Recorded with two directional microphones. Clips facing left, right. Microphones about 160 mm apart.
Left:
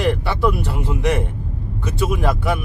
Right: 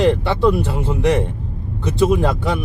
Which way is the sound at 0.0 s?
20° right (ahead or behind).